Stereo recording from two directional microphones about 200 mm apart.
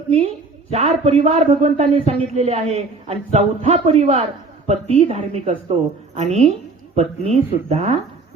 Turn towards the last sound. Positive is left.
turn(degrees=-35)  # may be behind; listen again after turning